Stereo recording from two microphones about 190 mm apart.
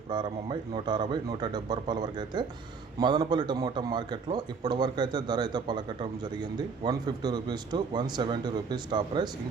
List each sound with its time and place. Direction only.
0.1 s a man's voice: 25° right (ahead or behind)